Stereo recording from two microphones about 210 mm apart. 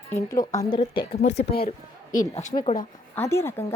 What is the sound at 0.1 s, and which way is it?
Speech, 15° left (ahead or behind).